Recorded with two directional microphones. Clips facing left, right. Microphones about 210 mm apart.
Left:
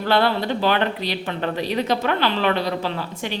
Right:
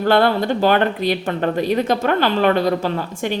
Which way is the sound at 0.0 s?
50° right (ahead or behind).